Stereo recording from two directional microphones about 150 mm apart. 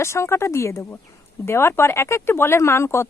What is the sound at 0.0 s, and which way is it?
A woman's voice, 20° left (ahead or behind).